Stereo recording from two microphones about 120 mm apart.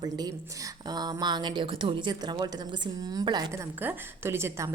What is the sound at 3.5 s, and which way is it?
A woman's voice, 20° right (ahead or behind).